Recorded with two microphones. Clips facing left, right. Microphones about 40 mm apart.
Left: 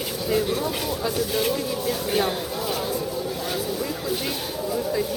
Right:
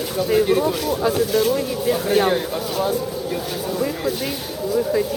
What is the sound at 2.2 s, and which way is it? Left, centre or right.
Speech, right.